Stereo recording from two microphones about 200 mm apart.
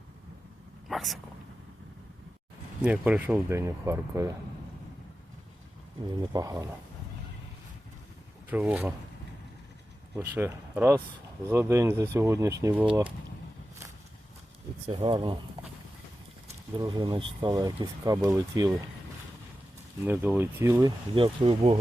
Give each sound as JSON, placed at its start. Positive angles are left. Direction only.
{"t": 0.9, "sound": "a sound", "side_deg": 0}
{"t": 2.8, "sound": "speech", "side_deg": -5}
{"t": 6.3, "sound": "speech", "side_deg": -15}
{"t": 8.4, "sound": "speech", "side_deg": -10}
{"t": 10.2, "sound": "speech", "side_deg": -10}
{"t": 12.8, "sound": "speech", "side_deg": -25}
{"t": 14.8, "sound": "speech", "side_deg": -25}
{"t": 16.7, "sound": "speech", "side_deg": -20}
{"t": 20.1, "sound": "speech", "side_deg": -10}
{"t": 21.2, "sound": "speech", "side_deg": -25}